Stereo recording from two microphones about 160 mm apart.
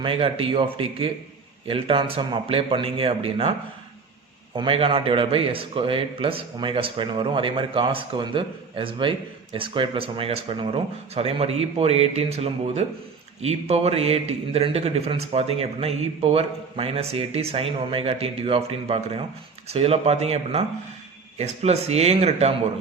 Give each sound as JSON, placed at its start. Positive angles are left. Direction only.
{"t": 0.0, "sound": "speech", "side_deg": -35}
{"t": 4.5, "sound": "speech", "side_deg": -35}